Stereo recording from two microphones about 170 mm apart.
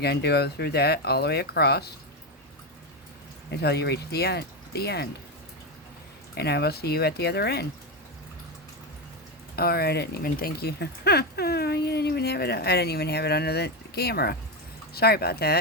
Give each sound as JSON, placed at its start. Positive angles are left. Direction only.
{"t": 0.0, "sound": "speech", "side_deg": 70}
{"t": 3.5, "sound": "speech", "side_deg": 70}
{"t": 6.3, "sound": "speech", "side_deg": 70}
{"t": 9.6, "sound": "speech", "side_deg": 65}